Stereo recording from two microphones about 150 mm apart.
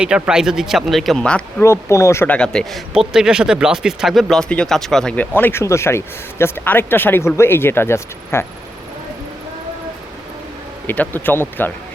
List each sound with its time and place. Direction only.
0.0 s speech: 5° right (ahead or behind)
1.6 s speech: 20° left (ahead or behind)
10.8 s speech: 10° left (ahead or behind)